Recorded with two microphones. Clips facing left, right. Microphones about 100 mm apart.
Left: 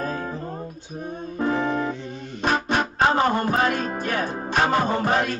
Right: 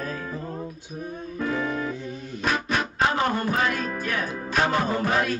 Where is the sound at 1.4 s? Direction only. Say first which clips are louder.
Left 4 dB; 30° left (ahead or behind).